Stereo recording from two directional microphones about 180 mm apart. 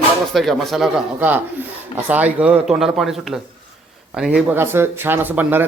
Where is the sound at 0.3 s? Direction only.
Centre (ahead or behind).